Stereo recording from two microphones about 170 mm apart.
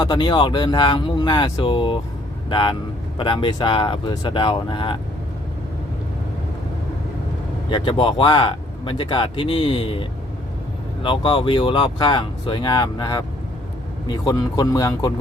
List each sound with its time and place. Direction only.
0.0 s speech: 25° left (ahead or behind)
7.7 s speech: 25° left (ahead or behind)